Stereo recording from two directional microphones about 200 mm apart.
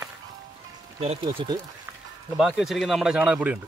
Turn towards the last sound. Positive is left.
turn(degrees=-5)  # may be behind; listen again after turning